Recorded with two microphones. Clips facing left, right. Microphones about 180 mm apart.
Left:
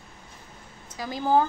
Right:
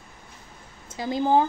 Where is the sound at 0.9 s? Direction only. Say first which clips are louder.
Right 2 dB; 25° right (ahead or behind).